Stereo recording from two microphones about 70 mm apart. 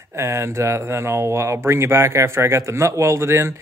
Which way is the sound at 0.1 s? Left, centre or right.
Right.